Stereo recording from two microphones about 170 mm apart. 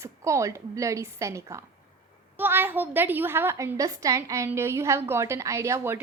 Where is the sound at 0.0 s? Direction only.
15° right (ahead or behind).